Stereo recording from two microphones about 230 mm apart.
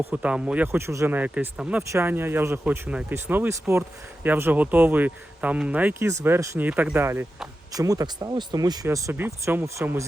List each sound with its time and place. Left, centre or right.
0.0 s speech: centre